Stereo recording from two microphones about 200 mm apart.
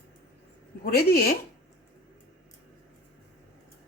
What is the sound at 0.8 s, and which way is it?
Speech, 50° left (ahead or behind).